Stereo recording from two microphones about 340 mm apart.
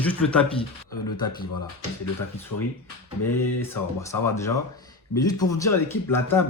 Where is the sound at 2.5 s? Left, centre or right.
Left.